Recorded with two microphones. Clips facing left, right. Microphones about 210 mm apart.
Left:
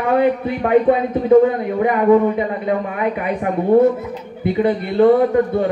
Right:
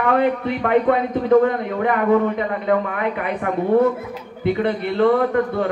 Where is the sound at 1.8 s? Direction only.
15° left (ahead or behind).